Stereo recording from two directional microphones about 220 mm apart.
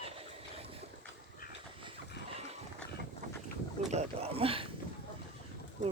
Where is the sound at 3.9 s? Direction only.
30° right (ahead or behind).